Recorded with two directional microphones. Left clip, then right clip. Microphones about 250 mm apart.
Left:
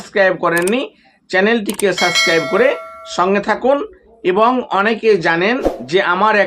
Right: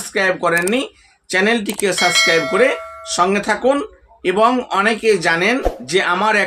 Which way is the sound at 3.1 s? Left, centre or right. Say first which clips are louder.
Left 1 dB; centre.